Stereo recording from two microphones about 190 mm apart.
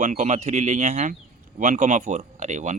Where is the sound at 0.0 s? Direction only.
40° right (ahead or behind).